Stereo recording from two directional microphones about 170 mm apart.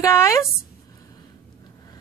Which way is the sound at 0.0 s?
15° left (ahead or behind).